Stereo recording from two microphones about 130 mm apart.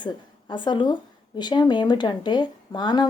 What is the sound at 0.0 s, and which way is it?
A woman's voice, 35° left (ahead or behind).